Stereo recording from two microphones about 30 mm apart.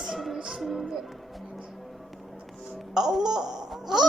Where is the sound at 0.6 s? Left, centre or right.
Centre.